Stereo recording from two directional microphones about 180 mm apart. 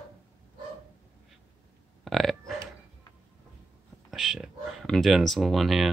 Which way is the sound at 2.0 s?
Centre (ahead or behind).